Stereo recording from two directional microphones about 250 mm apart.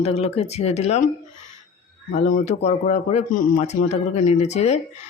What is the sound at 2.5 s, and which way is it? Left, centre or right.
Speech, left.